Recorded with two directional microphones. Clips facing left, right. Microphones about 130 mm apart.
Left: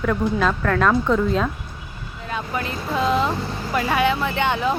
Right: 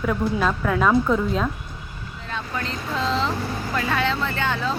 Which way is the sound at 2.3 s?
10° left (ahead or behind).